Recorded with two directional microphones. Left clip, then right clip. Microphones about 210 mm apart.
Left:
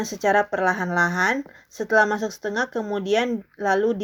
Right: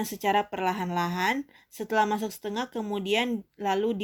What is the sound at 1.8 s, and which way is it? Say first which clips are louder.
Speech: left 6 dB; 50° right (ahead or behind).